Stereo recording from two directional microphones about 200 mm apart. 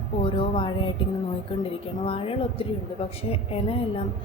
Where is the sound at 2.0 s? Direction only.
25° left (ahead or behind).